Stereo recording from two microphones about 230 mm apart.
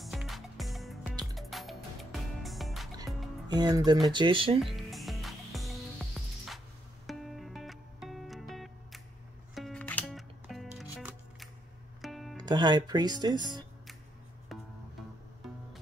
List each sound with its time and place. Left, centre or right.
0.0 s music: centre
3.4 s speech: centre
4.7 s music: centre
12.4 s speech: centre
14.5 s music: centre